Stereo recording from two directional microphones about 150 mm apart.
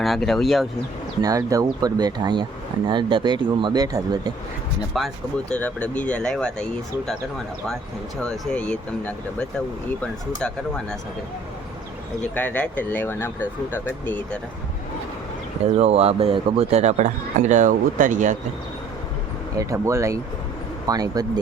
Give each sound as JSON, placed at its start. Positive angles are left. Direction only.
{"t": 0.0, "sound": "speech", "side_deg": 0}
{"t": 1.2, "sound": "speech", "side_deg": -25}
{"t": 4.9, "sound": "speech", "side_deg": 0}
{"t": 5.5, "sound": "speech", "side_deg": 10}
{"t": 8.2, "sound": "speech", "side_deg": 10}
{"t": 12.3, "sound": "speech", "side_deg": 10}
{"t": 15.8, "sound": "a man's voice", "side_deg": -45}
{"t": 19.5, "sound": "speech", "side_deg": -20}